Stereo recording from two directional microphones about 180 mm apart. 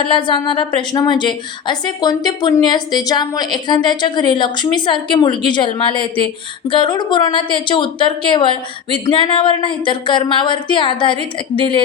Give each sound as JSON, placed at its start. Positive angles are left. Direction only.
{"t": 0.0, "sound": "a woman's voice", "side_deg": 25}